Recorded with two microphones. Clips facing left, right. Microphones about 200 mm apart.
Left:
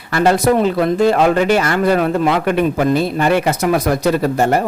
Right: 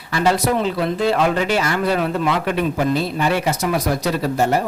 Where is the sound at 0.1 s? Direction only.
55° left (ahead or behind).